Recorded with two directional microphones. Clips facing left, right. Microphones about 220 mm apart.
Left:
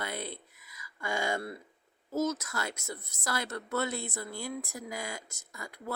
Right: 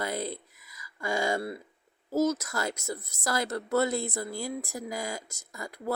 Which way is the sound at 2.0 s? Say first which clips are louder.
Right 5 dB; 35° right (ahead or behind).